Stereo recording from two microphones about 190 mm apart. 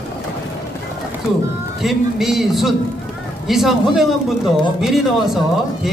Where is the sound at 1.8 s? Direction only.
Centre (ahead or behind).